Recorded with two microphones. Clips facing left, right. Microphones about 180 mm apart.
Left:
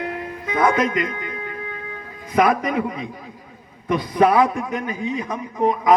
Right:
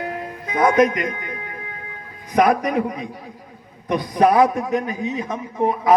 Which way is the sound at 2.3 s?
45° right (ahead or behind).